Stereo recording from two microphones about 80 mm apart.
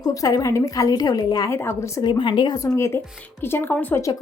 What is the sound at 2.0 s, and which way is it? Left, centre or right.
Speech, left.